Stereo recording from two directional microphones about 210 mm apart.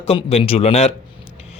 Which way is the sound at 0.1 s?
25° left (ahead or behind).